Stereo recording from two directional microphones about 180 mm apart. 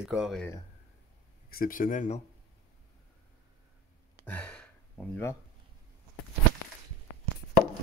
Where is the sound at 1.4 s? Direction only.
55° left (ahead or behind).